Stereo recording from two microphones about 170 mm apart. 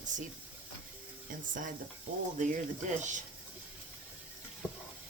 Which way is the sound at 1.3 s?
50° right (ahead or behind).